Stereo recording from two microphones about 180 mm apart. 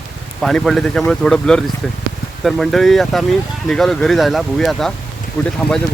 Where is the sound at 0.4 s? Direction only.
Centre (ahead or behind).